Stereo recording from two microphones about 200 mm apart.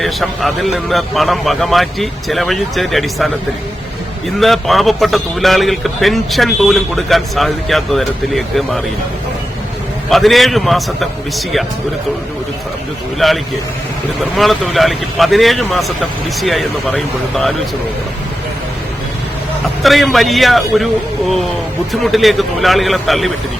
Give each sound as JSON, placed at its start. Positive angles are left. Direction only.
{"t": 0.0, "sound": "a man's voice", "side_deg": 0}
{"t": 4.4, "sound": "a man's voice", "side_deg": 0}
{"t": 10.1, "sound": "a man's voice", "side_deg": 0}
{"t": 13.1, "sound": "a man's voice", "side_deg": 0}
{"t": 19.8, "sound": "a man's voice", "side_deg": 0}
{"t": 22.0, "sound": "a man's voice", "side_deg": 0}